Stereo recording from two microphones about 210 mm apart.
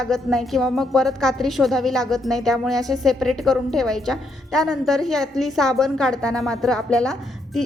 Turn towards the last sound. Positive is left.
turn(degrees=5)  # may be behind; listen again after turning